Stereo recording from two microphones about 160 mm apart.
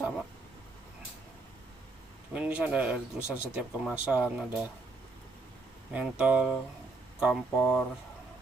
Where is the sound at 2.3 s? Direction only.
10° right (ahead or behind).